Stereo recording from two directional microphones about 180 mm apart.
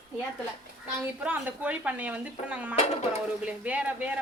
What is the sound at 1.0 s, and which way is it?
A woman's voice, 10° right (ahead or behind).